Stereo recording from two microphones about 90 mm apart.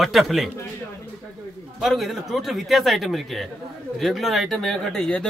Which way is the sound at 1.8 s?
Centre (ahead or behind).